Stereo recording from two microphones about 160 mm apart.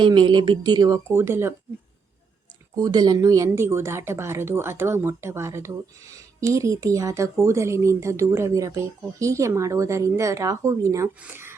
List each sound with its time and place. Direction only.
0.0 s speech: 30° right (ahead or behind)
2.7 s speech: 25° right (ahead or behind)